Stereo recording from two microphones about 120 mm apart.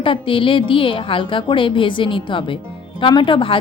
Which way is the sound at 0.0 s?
45° left (ahead or behind).